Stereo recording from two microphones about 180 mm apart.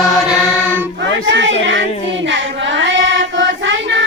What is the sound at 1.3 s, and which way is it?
Child singing, 90° right.